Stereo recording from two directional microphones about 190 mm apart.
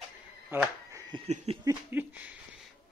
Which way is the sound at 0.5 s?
15° right (ahead or behind).